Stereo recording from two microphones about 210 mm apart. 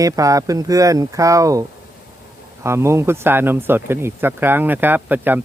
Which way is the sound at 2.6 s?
10° right (ahead or behind).